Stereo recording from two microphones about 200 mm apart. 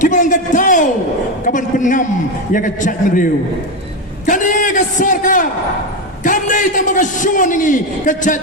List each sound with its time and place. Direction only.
0.0 s a man's voice: 40° left (ahead or behind)
4.3 s a sound: 40° left (ahead or behind)
6.2 s a man's voice: 40° left (ahead or behind)